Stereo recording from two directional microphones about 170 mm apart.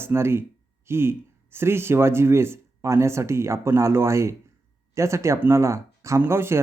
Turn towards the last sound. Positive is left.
turn(degrees=-15)  # may be behind; listen again after turning